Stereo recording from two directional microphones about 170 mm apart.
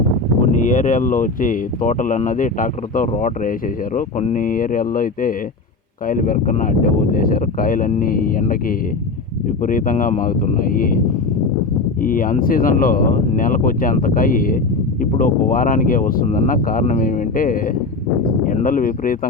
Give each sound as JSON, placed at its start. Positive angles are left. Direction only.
{"t": 0.6, "sound": "speech", "side_deg": 50}
{"t": 9.6, "sound": "speech", "side_deg": 50}
{"t": 12.0, "sound": "speech", "side_deg": 55}